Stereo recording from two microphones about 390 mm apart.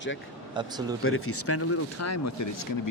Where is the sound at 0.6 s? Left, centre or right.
Centre.